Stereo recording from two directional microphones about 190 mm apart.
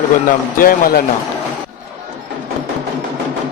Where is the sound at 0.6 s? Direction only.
50° left (ahead or behind).